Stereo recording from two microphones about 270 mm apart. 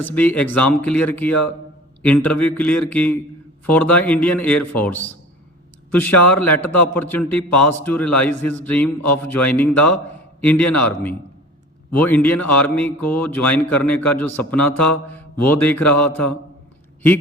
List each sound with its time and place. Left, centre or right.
0.1 s speech: centre